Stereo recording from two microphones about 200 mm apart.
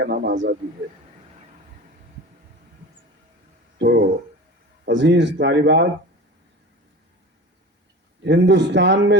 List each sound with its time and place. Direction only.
0.0 s speech: 50° right (ahead or behind)
3.8 s speech: 55° right (ahead or behind)
8.2 s speech: 60° right (ahead or behind)